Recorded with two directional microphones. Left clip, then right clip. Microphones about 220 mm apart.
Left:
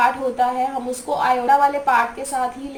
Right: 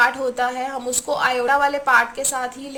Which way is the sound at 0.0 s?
40° right (ahead or behind).